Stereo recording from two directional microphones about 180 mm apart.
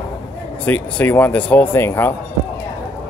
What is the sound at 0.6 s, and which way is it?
Speech, 10° left (ahead or behind).